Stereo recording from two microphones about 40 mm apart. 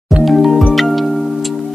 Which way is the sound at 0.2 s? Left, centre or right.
Centre.